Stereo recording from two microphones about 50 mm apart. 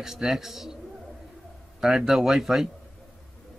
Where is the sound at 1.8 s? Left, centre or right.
Centre.